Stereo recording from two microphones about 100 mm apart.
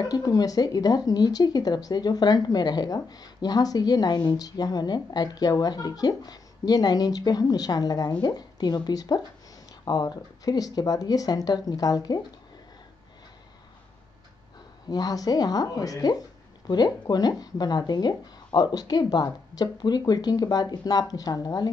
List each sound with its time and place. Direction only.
0.0 s speech: 40° left (ahead or behind)
14.9 s speech: 40° left (ahead or behind)